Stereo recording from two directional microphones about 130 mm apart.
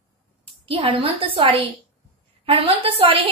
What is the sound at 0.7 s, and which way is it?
A woman's voice, 45° right (ahead or behind).